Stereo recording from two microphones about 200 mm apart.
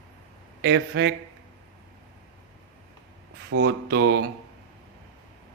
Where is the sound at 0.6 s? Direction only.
55° right (ahead or behind).